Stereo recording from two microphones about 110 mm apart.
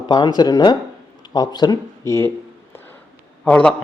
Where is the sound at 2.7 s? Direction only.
20° left (ahead or behind).